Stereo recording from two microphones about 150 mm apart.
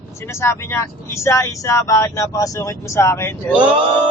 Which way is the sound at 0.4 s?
20° left (ahead or behind).